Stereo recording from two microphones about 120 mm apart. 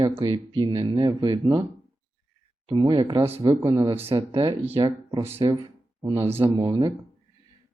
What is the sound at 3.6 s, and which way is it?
Speech, 30° right (ahead or behind).